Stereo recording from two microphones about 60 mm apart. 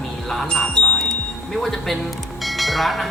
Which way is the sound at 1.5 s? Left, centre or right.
Centre.